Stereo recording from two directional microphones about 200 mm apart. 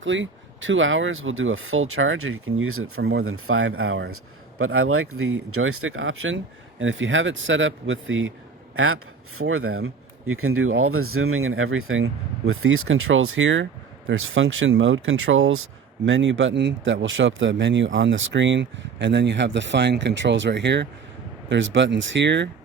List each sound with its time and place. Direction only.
0.0 s speech: 70° right (ahead or behind); by 3.0 s 90° right
3.0 s speech: 55° right (ahead or behind)
3.2 s speech: 90° right
8.7 s speech: 90° right
16.0 s speech: 70° right (ahead or behind)